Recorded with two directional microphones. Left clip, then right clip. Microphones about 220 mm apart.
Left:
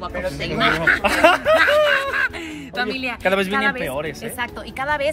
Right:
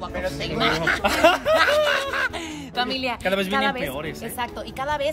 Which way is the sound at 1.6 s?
25° right (ahead or behind).